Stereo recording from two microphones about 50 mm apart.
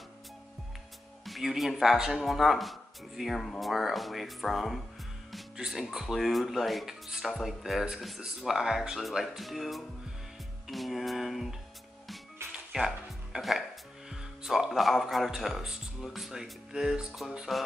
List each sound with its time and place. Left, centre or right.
1.2 s speech: centre
12.7 s music: centre
14.4 s speech: centre
16.3 s speech: centre
17.5 s speech: centre